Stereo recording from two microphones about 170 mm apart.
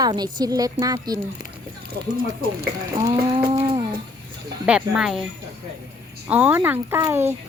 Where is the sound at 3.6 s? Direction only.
30° right (ahead or behind).